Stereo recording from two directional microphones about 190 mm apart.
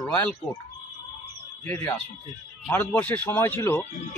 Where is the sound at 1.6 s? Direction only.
10° left (ahead or behind).